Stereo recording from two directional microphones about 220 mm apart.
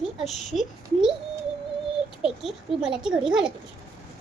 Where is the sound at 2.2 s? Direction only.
5° right (ahead or behind).